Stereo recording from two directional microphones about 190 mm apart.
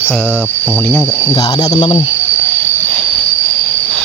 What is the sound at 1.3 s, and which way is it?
Speech, 30° left (ahead or behind).